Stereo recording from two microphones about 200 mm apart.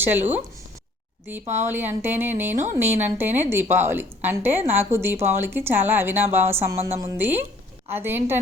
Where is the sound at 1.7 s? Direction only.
10° right (ahead or behind).